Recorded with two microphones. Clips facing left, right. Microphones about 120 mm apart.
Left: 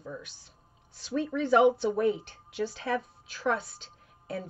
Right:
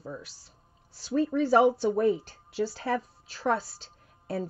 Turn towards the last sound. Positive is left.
turn(degrees=-35)  # may be behind; listen again after turning